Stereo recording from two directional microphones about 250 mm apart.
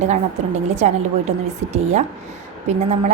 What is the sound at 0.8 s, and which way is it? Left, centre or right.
A woman's voice, right.